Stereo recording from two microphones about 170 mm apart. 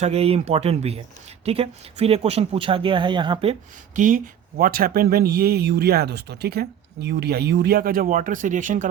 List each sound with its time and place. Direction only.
0.0 s speech: 40° right (ahead or behind)
3.9 s speech: 50° right (ahead or behind)